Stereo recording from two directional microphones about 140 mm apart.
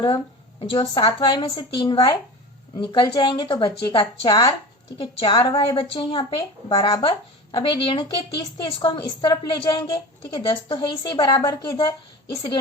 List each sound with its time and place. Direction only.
0.6 s a woman's voice: 40° left (ahead or behind)